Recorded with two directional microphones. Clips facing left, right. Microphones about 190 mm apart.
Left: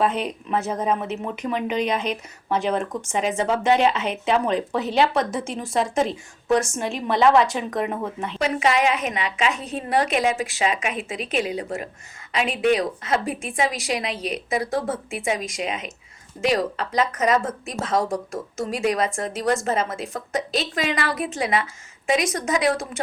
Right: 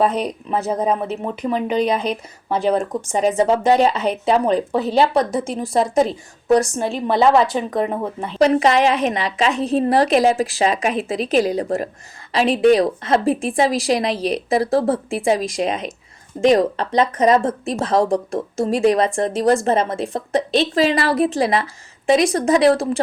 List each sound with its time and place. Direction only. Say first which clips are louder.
0.0 s speech: right 4 dB; 40° right (ahead or behind)